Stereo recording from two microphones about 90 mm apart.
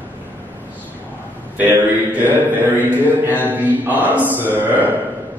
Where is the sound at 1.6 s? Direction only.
20° right (ahead or behind).